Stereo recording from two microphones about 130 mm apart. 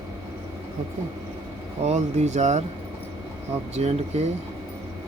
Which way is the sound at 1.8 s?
60° right (ahead or behind).